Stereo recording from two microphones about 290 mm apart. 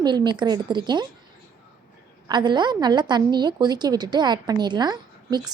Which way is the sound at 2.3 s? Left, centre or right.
Centre.